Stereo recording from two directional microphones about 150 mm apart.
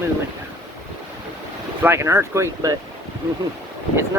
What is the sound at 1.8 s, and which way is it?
Speech, 15° right (ahead or behind).